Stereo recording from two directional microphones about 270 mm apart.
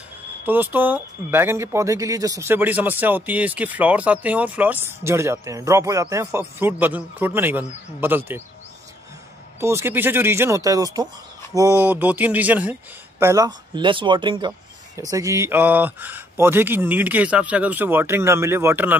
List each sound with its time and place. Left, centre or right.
0.5 s speech: centre
9.6 s speech: centre